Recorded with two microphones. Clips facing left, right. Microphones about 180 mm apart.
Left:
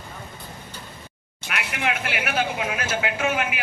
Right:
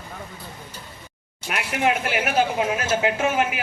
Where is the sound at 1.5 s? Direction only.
35° right (ahead or behind).